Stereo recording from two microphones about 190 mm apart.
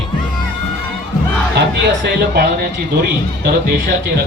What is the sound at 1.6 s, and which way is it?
Speech, 65° right (ahead or behind).